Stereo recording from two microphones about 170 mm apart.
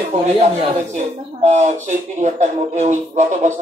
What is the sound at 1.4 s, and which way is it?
Speech, 45° right (ahead or behind).